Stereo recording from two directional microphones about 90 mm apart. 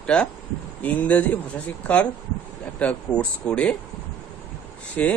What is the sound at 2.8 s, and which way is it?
Speech, 15° left (ahead or behind).